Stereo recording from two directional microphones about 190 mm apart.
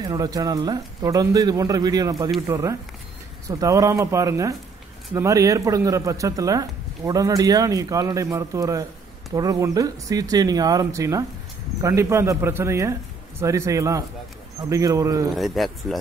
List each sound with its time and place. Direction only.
0.1 s speech: 20° right (ahead or behind)
15.3 s speech: centre (ahead or behind)